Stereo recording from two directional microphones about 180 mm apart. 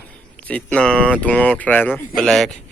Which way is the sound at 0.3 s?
5° left (ahead or behind).